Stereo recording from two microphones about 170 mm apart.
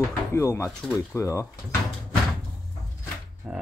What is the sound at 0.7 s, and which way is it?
Speech, centre (ahead or behind).